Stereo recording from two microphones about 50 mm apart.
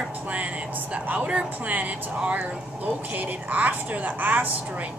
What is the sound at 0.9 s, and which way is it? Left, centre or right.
A woman's voice, right.